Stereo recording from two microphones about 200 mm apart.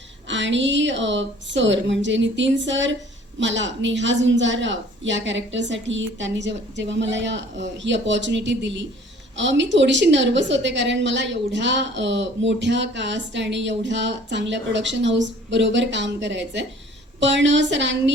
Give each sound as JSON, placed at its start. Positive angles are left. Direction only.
{"t": 0.3, "sound": "a woman's voice", "side_deg": -65}